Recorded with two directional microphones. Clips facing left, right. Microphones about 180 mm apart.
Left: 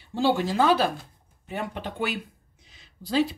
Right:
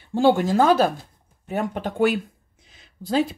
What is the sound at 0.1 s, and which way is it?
Speech, 50° right (ahead or behind).